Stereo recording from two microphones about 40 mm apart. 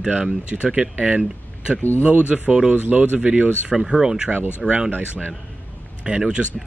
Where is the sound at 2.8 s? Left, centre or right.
Right.